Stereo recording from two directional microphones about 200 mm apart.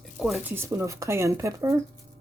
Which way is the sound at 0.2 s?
Centre (ahead or behind).